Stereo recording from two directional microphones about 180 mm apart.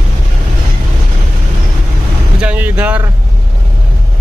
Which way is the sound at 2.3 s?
10° right (ahead or behind).